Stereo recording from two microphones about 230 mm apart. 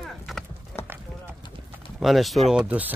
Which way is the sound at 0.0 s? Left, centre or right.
Centre.